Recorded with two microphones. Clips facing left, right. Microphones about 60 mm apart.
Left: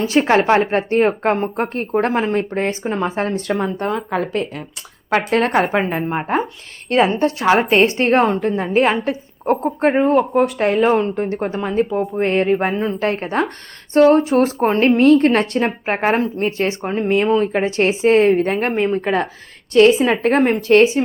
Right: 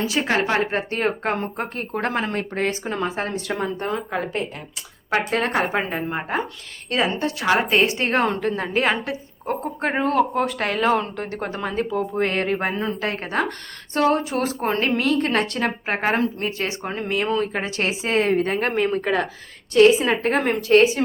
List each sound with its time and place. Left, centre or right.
0.0 s a woman's voice: left
5.1 s a woman's voice: left
8.2 s speech: left
9.0 s a woman's voice: left
10.0 s speech: centre
11.8 s a woman's voice: left